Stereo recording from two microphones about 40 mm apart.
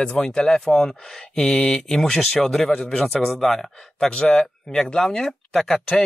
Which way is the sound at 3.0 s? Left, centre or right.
Centre.